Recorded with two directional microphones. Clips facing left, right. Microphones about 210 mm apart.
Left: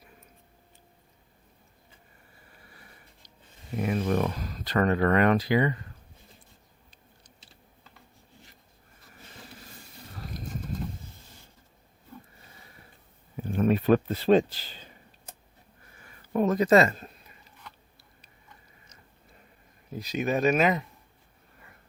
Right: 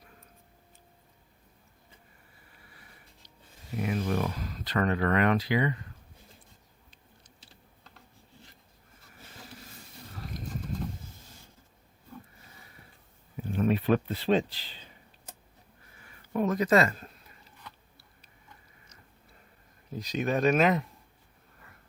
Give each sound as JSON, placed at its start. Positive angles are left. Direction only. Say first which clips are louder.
{"t": 3.8, "sound": "speech", "louder": "left 3 dB", "side_deg": 50}
{"t": 4.4, "sound": "speech", "louder": "left 3 dB", "side_deg": 40}
{"t": 13.3, "sound": "a sound", "louder": "left 3 dB", "side_deg": 45}
{"t": 16.3, "sound": "speech", "louder": "left 4 dB", "side_deg": 35}
{"t": 20.0, "sound": "speech", "louder": "left 1 dB", "side_deg": 10}